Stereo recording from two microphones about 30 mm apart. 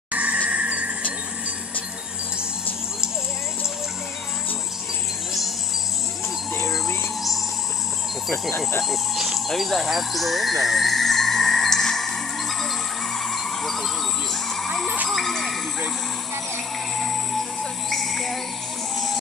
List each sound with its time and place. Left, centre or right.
0.1 s a sound: right
0.5 s music: right
8.8 s speech: centre
9.5 s music: centre
15.0 s a sound: centre
16.9 s music: centre